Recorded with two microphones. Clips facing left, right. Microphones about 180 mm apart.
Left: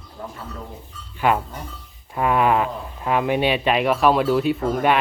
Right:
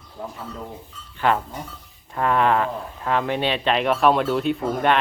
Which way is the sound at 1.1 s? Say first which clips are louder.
Left 1 dB; 10° left (ahead or behind).